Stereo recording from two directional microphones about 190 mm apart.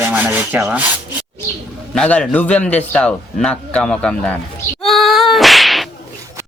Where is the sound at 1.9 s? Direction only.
5° left (ahead or behind).